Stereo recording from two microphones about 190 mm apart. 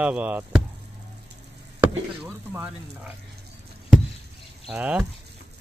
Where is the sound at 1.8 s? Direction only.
10° right (ahead or behind).